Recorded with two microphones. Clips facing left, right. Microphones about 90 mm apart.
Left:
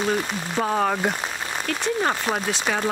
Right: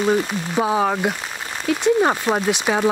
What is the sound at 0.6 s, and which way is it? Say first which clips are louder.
Speech: right 3 dB; 10° right (ahead or behind).